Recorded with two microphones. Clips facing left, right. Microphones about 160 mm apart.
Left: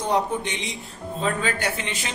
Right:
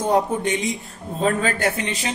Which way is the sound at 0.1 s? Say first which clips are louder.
Right 4 dB; 45° right (ahead or behind).